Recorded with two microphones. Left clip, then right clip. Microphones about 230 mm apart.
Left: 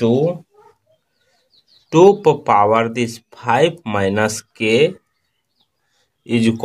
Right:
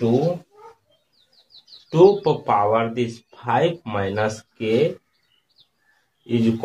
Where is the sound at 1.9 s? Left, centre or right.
Left.